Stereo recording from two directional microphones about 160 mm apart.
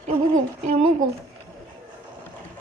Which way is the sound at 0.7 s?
45° right (ahead or behind).